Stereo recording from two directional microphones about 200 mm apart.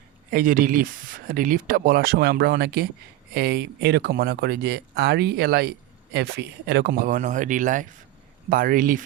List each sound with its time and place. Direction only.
0.3 s speech: 45° right (ahead or behind)